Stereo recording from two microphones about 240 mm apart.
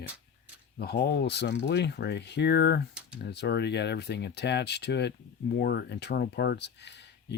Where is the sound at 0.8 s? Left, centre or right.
Left.